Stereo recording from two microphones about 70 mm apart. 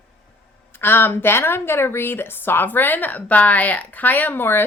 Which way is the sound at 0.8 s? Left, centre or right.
Left.